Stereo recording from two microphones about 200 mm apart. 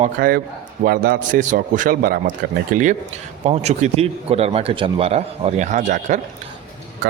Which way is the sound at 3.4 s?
35° right (ahead or behind).